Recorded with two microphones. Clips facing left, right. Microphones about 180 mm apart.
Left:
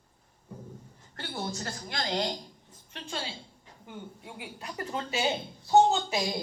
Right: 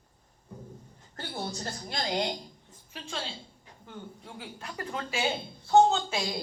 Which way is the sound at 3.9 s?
15° left (ahead or behind).